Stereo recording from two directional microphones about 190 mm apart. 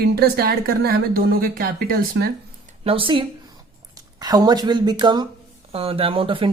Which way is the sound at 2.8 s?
30° right (ahead or behind).